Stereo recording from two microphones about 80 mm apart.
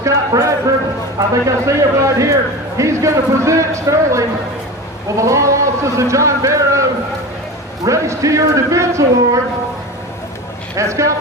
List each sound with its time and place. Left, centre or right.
0.0 s a man's voice: right
7.9 s a man's voice: right
10.8 s a man's voice: right